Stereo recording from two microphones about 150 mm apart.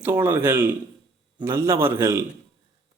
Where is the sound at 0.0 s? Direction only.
15° right (ahead or behind).